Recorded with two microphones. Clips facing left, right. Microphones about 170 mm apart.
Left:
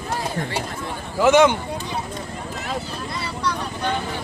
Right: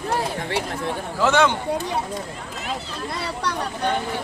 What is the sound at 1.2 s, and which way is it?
Speech, 15° left (ahead or behind).